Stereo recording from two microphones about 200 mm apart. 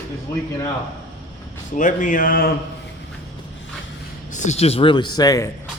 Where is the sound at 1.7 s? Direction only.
40° left (ahead or behind).